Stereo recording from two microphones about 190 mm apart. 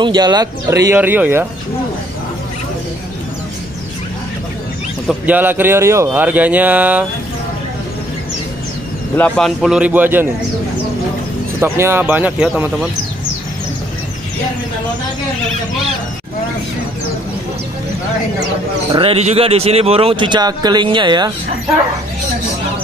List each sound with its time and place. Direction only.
0.0 s speech: 20° right (ahead or behind)
5.0 s speech: 10° right (ahead or behind)
9.1 s speech: 10° left (ahead or behind); by 10.2 s 10° right (ahead or behind)
11.6 s speech: 15° right (ahead or behind)
18.9 s speech: 30° right (ahead or behind)